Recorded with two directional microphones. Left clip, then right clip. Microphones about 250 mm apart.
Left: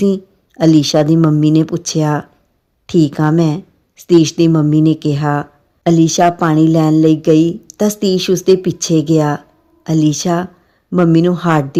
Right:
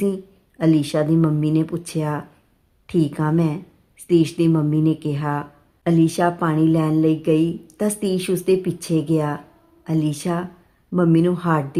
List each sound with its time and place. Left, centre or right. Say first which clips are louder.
0.0 s a woman's voice: left 8 dB; left